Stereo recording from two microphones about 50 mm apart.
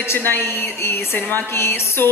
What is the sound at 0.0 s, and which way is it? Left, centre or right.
Speech, left.